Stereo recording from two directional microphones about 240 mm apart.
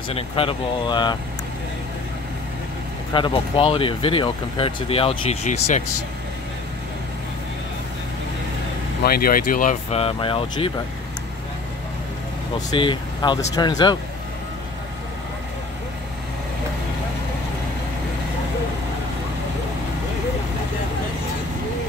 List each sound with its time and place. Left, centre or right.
0.1 s speech: left
3.1 s speech: centre
9.0 s speech: left
12.5 s speech: centre